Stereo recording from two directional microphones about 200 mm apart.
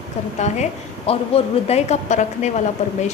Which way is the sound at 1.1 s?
30° left (ahead or behind).